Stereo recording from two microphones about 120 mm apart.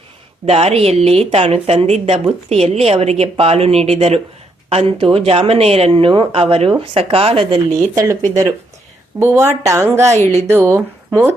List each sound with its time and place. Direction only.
0.4 s a woman's voice: 55° right (ahead or behind)
7.9 s a woman's voice: 25° right (ahead or behind)
10.1 s speech: 70° right (ahead or behind)
10.4 s speech: 20° right (ahead or behind)